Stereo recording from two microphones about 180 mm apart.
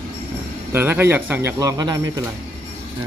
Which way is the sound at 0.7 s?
10° right (ahead or behind).